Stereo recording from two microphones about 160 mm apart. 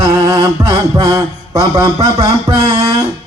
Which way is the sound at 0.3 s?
25° right (ahead or behind).